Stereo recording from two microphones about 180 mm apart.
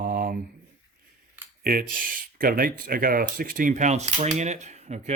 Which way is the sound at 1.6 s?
55° right (ahead or behind).